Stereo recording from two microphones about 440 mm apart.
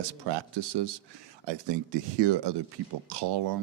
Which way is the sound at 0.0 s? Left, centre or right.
Right.